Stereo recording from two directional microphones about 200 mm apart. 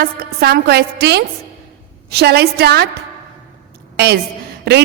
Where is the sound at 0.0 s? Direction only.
50° right (ahead or behind).